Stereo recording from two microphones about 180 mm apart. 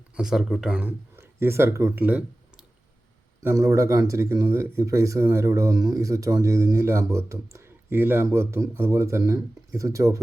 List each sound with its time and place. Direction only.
0.2 s speech: centre (ahead or behind)